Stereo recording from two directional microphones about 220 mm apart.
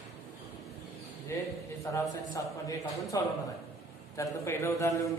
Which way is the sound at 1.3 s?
10° left (ahead or behind).